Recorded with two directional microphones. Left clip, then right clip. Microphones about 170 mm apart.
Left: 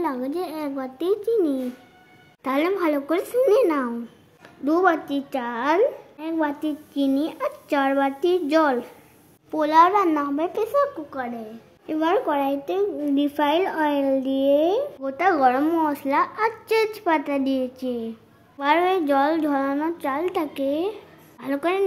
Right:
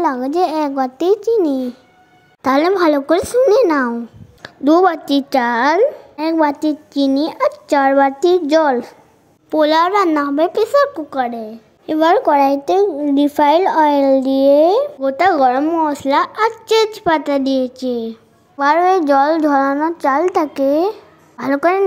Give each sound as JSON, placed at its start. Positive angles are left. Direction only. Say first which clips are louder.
{"t": 0.0, "sound": "a child's voice", "louder": "right 11 dB", "side_deg": -35}
{"t": 4.4, "sound": "a child's voice", "louder": "right 9 dB", "side_deg": -40}
{"t": 15.6, "sound": "speech", "louder": "right 6 dB", "side_deg": -5}
{"t": 15.9, "sound": "a child's voice", "louder": "right 7 dB", "side_deg": -20}
{"t": 19.6, "sound": "speech", "louder": "right 9 dB", "side_deg": -15}
{"t": 20.0, "sound": "a child's voice", "louder": "right 10 dB", "side_deg": -30}